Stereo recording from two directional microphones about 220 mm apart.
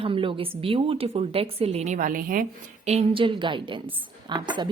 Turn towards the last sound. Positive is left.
turn(degrees=-20)  # may be behind; listen again after turning